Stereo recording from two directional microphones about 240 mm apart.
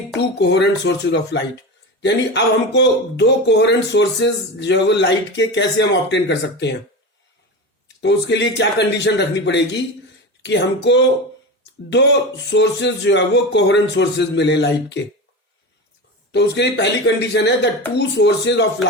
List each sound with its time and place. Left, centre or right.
0.2 s speech: left
8.0 s speech: left
12.5 s speech: left
16.3 s speech: left